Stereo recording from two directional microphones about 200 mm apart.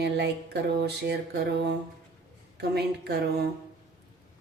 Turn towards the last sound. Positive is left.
turn(degrees=-55)  # may be behind; listen again after turning